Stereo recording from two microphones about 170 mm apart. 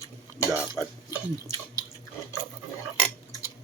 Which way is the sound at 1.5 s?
15° left (ahead or behind).